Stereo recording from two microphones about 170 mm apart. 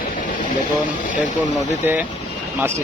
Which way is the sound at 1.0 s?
45° left (ahead or behind).